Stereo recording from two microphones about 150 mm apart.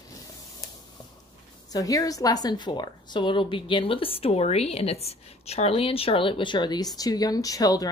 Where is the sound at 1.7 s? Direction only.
25° left (ahead or behind).